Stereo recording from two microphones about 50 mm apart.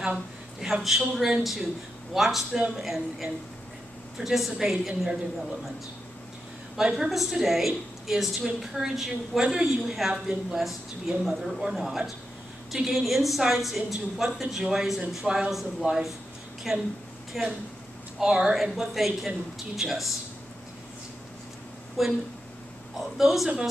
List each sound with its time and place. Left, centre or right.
0.6 s a woman's voice: centre
6.8 s a woman's voice: centre
15.0 s a woman's voice: centre
22.0 s a woman's voice: centre